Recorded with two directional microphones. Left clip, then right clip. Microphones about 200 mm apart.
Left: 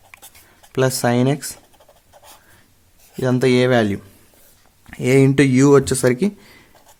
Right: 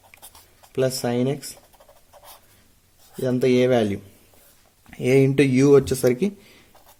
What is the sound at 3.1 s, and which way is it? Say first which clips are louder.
Speech: left 3 dB; 35° left (ahead or behind).